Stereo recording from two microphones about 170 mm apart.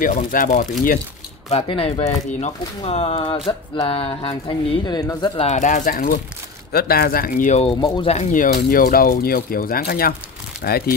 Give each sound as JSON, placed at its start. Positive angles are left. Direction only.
{"t": 0.0, "sound": "speech", "side_deg": 55}
{"t": 1.5, "sound": "speech", "side_deg": 35}
{"t": 5.4, "sound": "speech", "side_deg": 45}